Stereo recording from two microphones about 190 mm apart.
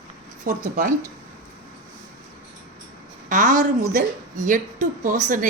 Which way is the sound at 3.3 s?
40° right (ahead or behind).